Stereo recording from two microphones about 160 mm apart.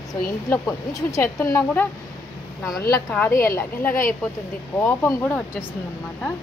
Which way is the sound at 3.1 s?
10° left (ahead or behind).